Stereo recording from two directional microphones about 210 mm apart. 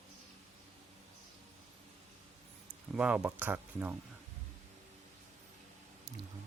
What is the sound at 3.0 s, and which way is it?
Speech, 5° right (ahead or behind).